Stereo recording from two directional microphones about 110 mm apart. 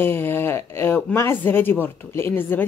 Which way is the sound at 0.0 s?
20° left (ahead or behind).